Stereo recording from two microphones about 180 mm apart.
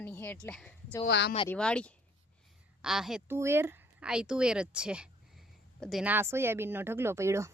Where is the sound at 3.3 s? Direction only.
15° right (ahead or behind).